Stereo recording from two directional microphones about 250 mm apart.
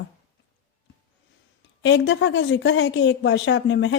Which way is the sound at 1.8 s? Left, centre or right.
Left.